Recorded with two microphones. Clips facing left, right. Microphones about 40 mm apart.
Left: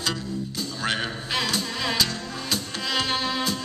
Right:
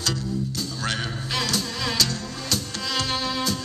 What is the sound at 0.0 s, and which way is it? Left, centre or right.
Music, centre.